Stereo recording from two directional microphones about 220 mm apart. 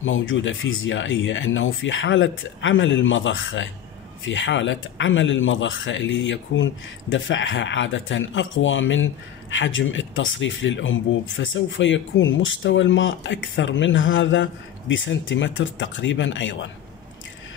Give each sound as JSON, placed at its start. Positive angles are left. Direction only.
{"t": 0.0, "sound": "speech", "side_deg": 60}